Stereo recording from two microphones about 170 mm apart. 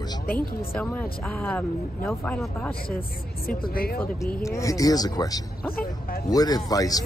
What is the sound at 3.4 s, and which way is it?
Speech, 60° left (ahead or behind).